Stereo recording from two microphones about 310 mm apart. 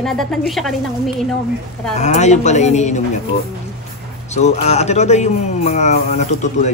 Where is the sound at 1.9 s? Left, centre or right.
Left.